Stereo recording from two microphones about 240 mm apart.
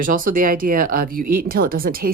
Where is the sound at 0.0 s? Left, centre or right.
Right.